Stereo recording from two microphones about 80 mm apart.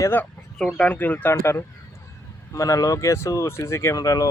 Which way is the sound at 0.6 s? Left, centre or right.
Centre.